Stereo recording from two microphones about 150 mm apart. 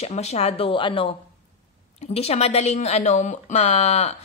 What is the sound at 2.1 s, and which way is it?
Speech, 45° left (ahead or behind).